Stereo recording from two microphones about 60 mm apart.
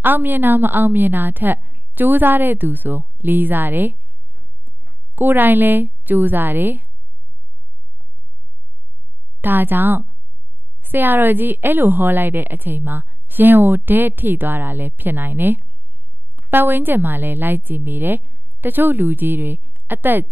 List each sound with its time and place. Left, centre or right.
0.0 s a woman's voice: right
9.4 s a woman's voice: right